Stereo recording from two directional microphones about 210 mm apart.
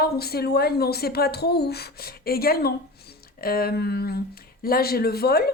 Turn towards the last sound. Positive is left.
turn(degrees=45)  # may be behind; listen again after turning